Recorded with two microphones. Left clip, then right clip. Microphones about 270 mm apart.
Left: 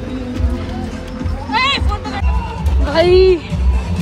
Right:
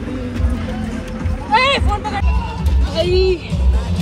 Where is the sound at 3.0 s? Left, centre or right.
Centre.